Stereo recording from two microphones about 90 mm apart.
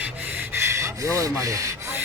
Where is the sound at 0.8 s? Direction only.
40° right (ahead or behind).